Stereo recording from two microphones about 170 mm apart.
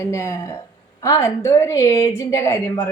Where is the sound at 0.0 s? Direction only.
15° left (ahead or behind).